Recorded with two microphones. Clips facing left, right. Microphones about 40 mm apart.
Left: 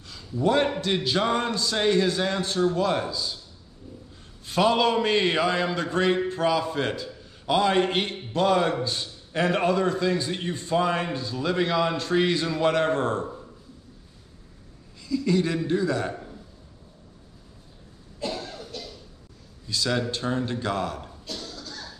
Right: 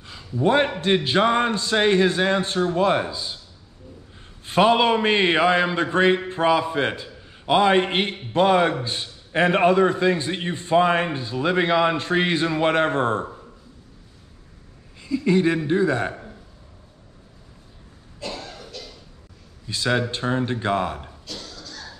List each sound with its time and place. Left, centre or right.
0.0 s a man's voice: right
4.5 s a man's voice: right
15.0 s a man's voice: right
19.7 s a man's voice: right